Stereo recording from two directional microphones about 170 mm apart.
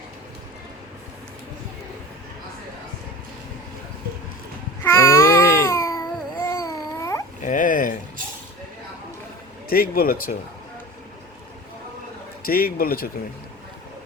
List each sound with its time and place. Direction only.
4.8 s babbling: 15° left (ahead or behind)
7.4 s a sound: 50° left (ahead or behind)
9.6 s speech: 60° left (ahead or behind)
12.5 s speech: 60° left (ahead or behind)